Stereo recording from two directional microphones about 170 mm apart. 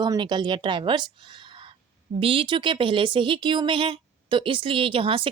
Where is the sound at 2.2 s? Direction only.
30° right (ahead or behind).